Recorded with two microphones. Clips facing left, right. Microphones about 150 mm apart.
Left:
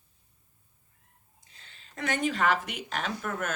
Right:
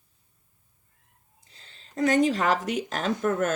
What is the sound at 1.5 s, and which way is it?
Speech, 35° right (ahead or behind).